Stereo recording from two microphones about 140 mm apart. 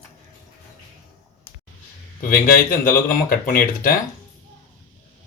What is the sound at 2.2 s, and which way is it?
Speech, 80° left.